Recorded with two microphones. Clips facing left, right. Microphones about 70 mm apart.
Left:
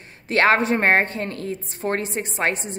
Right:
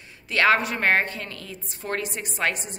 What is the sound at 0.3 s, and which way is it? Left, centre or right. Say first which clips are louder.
A woman's voice: left 3 dB; left.